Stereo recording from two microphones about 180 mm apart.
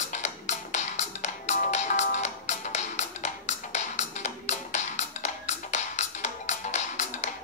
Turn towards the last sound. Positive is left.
turn(degrees=40)  # may be behind; listen again after turning